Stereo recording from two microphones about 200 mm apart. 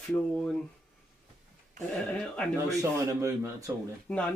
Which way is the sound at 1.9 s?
5° left (ahead or behind).